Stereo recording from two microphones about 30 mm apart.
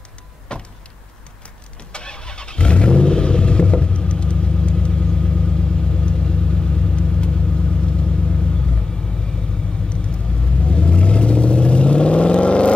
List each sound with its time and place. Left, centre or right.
0.5 s vehicle: left
1.9 s vehicle: left
9.8 s vehicle: left